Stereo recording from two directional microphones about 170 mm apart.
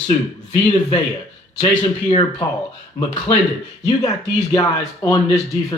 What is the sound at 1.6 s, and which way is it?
Speech, 30° left (ahead or behind).